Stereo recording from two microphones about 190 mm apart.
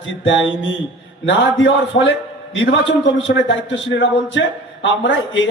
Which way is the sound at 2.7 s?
70° left (ahead or behind).